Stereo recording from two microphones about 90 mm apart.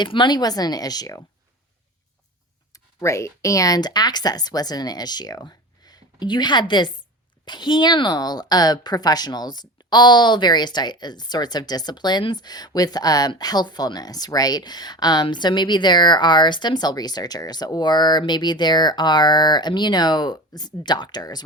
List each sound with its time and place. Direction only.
0.0 s speech: 60° left (ahead or behind); by 1.2 s 45° left (ahead or behind)
2.7 s speech: 35° left (ahead or behind)